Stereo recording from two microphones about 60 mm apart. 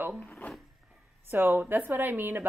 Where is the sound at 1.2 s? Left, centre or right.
Right.